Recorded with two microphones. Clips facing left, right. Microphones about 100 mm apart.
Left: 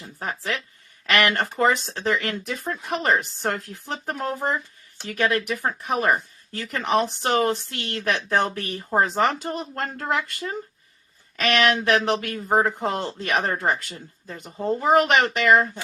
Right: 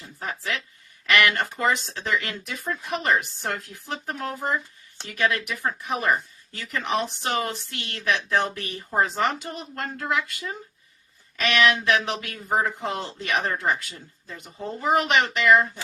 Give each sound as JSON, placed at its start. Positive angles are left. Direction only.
{"t": 0.2, "sound": "speech", "side_deg": 40}
{"t": 11.3, "sound": "speech", "side_deg": 40}